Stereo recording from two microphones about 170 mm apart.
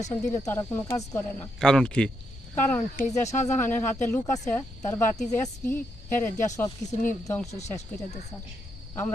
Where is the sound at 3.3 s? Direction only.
45° left (ahead or behind).